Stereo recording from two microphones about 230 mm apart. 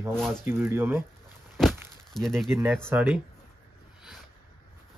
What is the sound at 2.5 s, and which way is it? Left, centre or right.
Speech, centre.